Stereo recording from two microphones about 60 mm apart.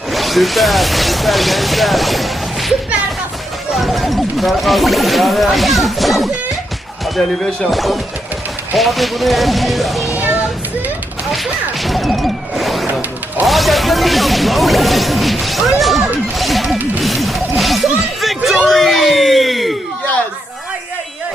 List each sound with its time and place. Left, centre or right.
0.1 s speech: centre
3.8 s speech: centre
11.3 s whoosh: centre
13.4 s speech: centre
15.8 s music: centre